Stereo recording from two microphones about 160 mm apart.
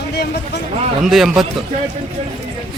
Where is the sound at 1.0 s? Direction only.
Centre (ahead or behind).